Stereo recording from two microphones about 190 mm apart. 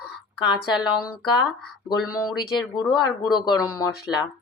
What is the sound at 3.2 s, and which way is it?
Speech, 20° left (ahead or behind).